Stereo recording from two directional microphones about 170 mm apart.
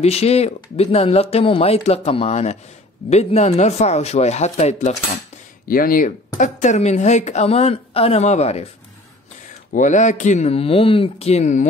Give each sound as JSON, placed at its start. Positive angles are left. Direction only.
{"t": 0.0, "sound": "speech", "side_deg": 35}
{"t": 5.7, "sound": "speech", "side_deg": 55}
{"t": 9.7, "sound": "speech", "side_deg": 50}